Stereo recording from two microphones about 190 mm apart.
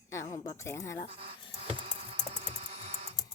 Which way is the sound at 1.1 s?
30° right (ahead or behind).